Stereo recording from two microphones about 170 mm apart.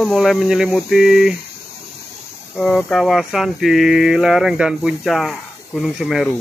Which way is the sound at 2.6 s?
5° left (ahead or behind).